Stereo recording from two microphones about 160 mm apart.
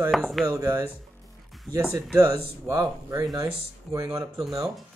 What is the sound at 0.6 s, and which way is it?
A man's voice, 15° right (ahead or behind).